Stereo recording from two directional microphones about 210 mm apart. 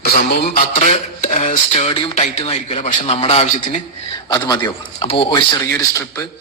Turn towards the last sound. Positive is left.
turn(degrees=15)  # may be behind; listen again after turning